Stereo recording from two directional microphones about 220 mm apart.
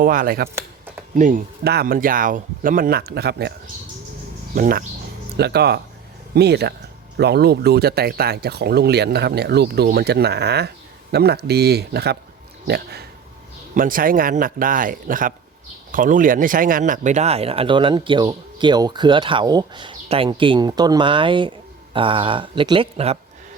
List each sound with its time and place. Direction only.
0.0 s speech: 40° right (ahead or behind)
4.5 s speech: 40° right (ahead or behind)